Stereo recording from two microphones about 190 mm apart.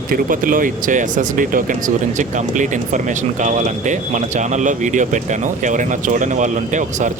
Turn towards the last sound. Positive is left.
turn(degrees=-40)  # may be behind; listen again after turning